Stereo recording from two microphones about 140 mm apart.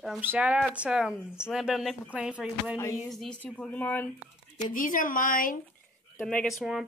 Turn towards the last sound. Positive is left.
turn(degrees=5)  # may be behind; listen again after turning